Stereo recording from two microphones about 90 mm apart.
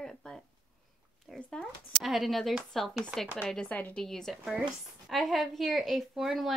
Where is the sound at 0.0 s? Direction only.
10° left (ahead or behind).